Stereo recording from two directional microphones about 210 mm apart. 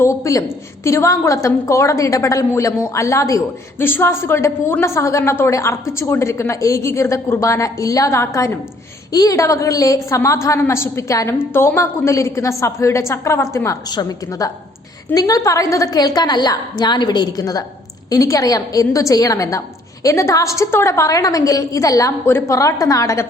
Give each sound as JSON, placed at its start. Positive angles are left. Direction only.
{"t": 0.0, "sound": "a woman's voice", "side_deg": 15}